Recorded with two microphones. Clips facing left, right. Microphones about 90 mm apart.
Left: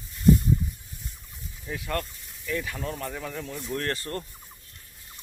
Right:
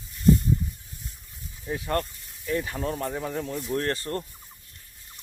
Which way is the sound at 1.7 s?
30° right (ahead or behind).